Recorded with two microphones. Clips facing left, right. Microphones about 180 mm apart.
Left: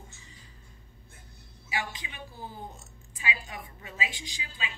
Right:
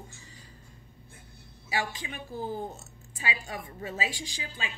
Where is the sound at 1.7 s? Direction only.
40° right (ahead or behind).